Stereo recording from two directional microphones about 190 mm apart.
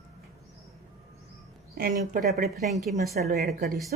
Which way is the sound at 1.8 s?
50° right (ahead or behind).